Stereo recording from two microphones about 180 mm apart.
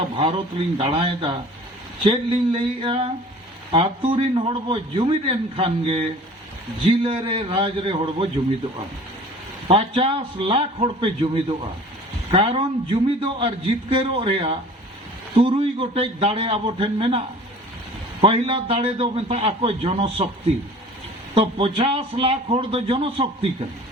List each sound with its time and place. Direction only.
0.2 s a man's voice: 30° right (ahead or behind)
9.6 s a man's voice: 30° right (ahead or behind)
21.3 s a man's voice: 30° right (ahead or behind)